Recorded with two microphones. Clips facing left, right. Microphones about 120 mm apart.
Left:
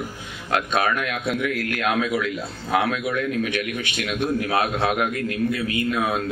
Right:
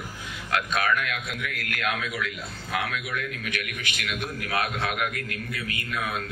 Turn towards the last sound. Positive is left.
turn(degrees=30)  # may be behind; listen again after turning